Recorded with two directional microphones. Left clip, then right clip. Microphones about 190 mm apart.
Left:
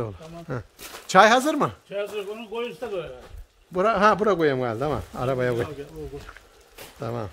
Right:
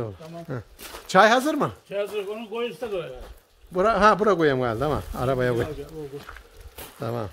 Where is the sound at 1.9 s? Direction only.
15° right (ahead or behind).